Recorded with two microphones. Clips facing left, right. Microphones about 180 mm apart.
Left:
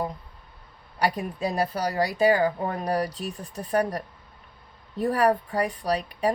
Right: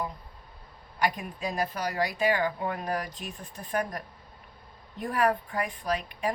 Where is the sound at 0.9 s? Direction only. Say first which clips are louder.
Left 4 dB; 35° left (ahead or behind).